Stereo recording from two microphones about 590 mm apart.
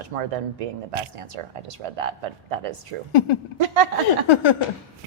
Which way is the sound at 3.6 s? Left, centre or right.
Right.